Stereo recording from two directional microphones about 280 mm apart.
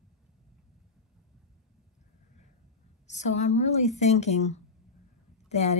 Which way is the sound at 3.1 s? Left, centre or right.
Left.